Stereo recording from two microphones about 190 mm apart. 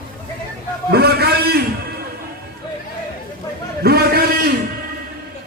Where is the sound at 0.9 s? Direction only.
55° right (ahead or behind).